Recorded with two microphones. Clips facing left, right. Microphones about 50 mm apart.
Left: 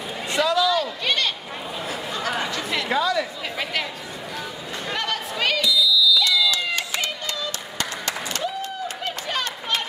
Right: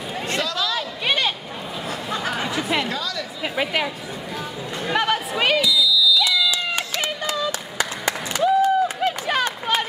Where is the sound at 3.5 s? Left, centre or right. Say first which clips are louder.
Right 5 dB; centre.